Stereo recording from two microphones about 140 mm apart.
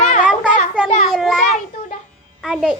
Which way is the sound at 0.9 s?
65° left (ahead or behind).